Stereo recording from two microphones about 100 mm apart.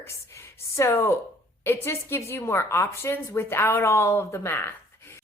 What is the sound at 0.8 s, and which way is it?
A woman's voice, 25° left (ahead or behind).